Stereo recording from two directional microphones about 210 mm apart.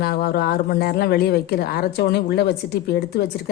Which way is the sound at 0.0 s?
45° left (ahead or behind).